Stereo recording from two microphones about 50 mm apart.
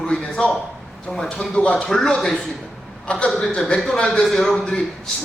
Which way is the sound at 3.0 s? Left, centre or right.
Left.